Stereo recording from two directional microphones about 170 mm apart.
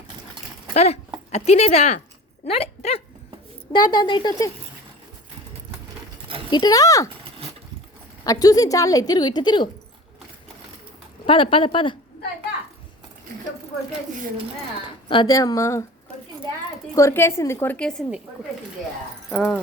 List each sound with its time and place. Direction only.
0.7 s speech: 40° left (ahead or behind)
3.7 s a woman's voice: 25° left (ahead or behind)
6.5 s a woman's voice: 25° left (ahead or behind)
8.2 s a woman's voice: 20° left (ahead or behind)
11.3 s speech: 30° left (ahead or behind)
15.1 s a woman's voice: 25° left (ahead or behind)
16.9 s a woman's voice: 15° left (ahead or behind)
19.3 s speech: 5° left (ahead or behind)